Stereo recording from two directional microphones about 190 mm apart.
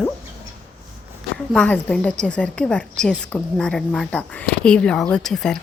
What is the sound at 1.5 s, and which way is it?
Speech, 5° left (ahead or behind).